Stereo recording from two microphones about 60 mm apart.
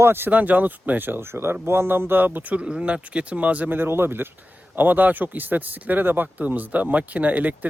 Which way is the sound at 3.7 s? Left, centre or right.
Right.